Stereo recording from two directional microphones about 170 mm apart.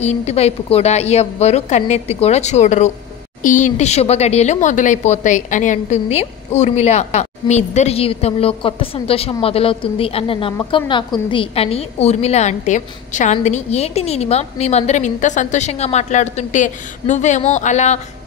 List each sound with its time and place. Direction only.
0.0 s a woman's voice: 40° left (ahead or behind)